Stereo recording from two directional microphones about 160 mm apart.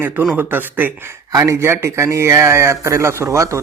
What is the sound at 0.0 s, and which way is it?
Speech, 10° right (ahead or behind).